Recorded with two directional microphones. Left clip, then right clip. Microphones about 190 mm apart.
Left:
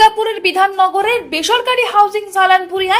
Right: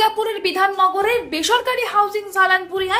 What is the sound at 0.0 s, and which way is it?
A woman's voice, 10° left (ahead or behind).